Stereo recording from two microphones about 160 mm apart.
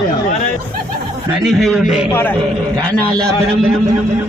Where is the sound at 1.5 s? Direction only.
Centre (ahead or behind).